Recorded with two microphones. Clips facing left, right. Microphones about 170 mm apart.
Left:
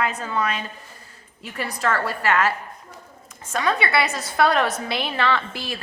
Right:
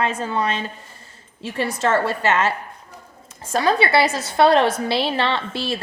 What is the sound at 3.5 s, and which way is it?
A woman's voice, 30° right (ahead or behind).